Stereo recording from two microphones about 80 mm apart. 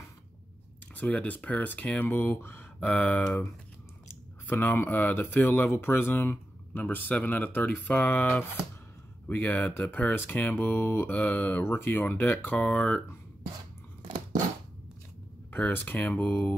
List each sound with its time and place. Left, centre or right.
0.9 s speech: centre
15.5 s speech: left